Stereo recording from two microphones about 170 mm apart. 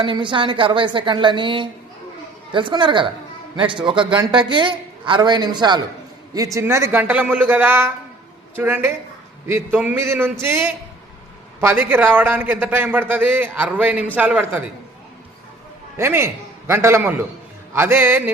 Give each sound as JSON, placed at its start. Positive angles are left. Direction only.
{"t": 0.0, "sound": "a man's voice", "side_deg": -30}
{"t": 16.0, "sound": "a man's voice", "side_deg": -15}